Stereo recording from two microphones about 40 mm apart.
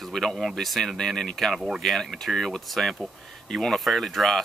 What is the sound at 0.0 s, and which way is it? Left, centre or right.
Speech, centre.